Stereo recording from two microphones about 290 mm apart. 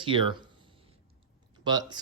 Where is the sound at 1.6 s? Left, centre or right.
Centre.